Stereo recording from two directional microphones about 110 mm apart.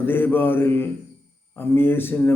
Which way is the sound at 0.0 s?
20° left (ahead or behind).